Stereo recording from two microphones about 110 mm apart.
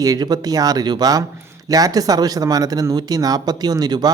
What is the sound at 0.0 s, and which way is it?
Speech, 35° right (ahead or behind).